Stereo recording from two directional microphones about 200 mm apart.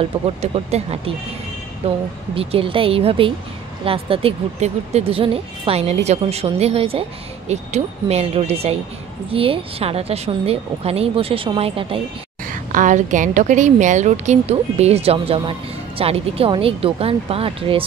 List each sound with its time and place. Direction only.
0.0 s a woman's voice: 30° right (ahead or behind)
12.4 s a woman's voice: 40° right (ahead or behind)